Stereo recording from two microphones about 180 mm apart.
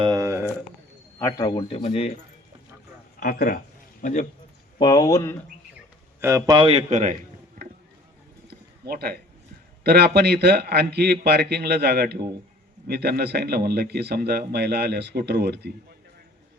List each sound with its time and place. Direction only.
0.0 s a sound: 20° right (ahead or behind)
1.2 s speech: 20° left (ahead or behind)
1.5 s a man's voice: 30° left (ahead or behind)
3.2 s speech: 55° left (ahead or behind)
4.0 s a man's voice: 45° left (ahead or behind)
4.8 s speech: 25° left (ahead or behind)
6.1 s speech: 15° right (ahead or behind)
6.7 s a man's voice: 35° right (ahead or behind)
8.4 s a sound: 60° right (ahead or behind)
9.8 s speech: 60° right (ahead or behind)